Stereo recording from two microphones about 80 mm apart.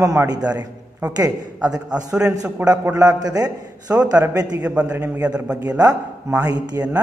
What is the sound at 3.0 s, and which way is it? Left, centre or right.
A man's voice, right.